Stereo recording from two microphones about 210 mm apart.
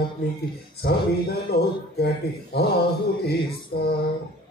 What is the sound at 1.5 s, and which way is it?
A man's voice, 50° left (ahead or behind).